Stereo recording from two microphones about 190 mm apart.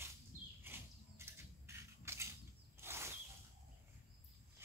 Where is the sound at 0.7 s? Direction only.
10° right (ahead or behind).